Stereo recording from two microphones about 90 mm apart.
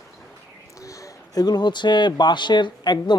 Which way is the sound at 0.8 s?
35° left (ahead or behind).